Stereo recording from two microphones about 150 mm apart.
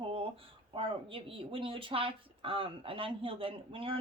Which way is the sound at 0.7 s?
35° right (ahead or behind).